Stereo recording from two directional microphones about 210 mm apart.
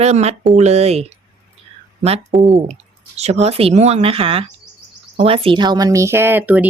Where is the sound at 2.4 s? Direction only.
30° right (ahead or behind).